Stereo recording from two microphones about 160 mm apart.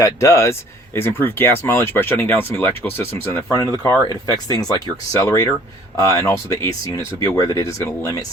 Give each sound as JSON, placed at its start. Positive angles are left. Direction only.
{"t": 0.0, "sound": "speech", "side_deg": 20}